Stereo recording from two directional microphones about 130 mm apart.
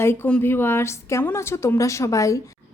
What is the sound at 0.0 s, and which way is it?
A woman's voice, 20° left (ahead or behind).